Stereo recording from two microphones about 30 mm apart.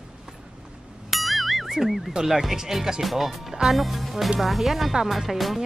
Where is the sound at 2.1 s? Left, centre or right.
Right.